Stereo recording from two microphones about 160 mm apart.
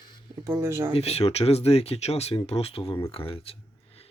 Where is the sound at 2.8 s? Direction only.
20° left (ahead or behind).